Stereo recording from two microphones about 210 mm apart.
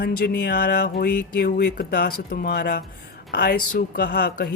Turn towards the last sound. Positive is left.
turn(degrees=50)  # may be behind; listen again after turning